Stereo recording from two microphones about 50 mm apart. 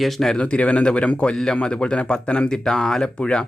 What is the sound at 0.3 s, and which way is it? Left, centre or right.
Speech, left.